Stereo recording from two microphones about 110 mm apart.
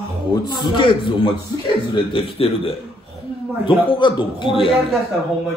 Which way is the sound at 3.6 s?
50° left (ahead or behind).